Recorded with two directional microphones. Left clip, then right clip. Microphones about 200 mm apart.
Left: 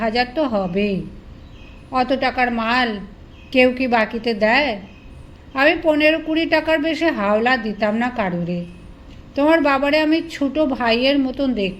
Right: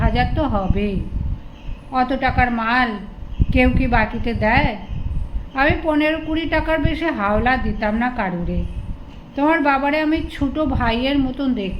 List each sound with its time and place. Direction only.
0.0 s a woman's voice: 30° left (ahead or behind)